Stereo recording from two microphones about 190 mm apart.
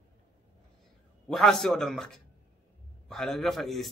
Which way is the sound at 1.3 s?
Centre (ahead or behind).